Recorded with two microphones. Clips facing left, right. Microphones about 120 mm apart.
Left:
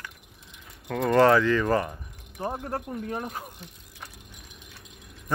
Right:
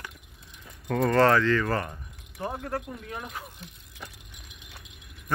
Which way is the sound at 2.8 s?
40° left (ahead or behind).